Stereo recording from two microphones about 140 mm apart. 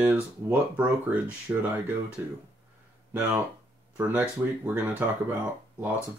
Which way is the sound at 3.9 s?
10° right (ahead or behind).